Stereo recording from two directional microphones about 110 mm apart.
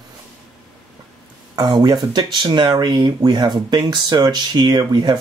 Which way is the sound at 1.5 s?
40° right (ahead or behind).